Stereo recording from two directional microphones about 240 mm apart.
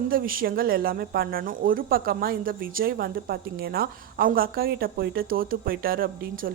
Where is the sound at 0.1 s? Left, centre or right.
Right.